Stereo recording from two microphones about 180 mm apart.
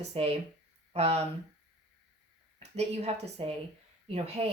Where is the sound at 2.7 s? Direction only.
35° right (ahead or behind).